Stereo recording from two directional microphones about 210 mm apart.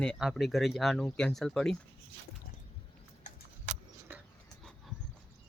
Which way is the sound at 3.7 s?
35° right (ahead or behind).